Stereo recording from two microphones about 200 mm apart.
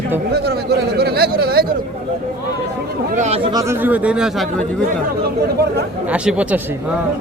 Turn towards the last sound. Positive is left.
turn(degrees=-5)  # may be behind; listen again after turning